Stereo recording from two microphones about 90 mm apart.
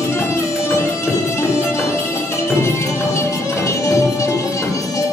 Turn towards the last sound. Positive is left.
turn(degrees=35)  # may be behind; listen again after turning